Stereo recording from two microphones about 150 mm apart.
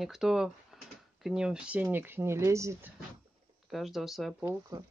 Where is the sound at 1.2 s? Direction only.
5° right (ahead or behind).